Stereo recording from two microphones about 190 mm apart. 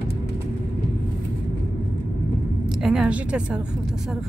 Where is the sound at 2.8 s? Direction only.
5° right (ahead or behind).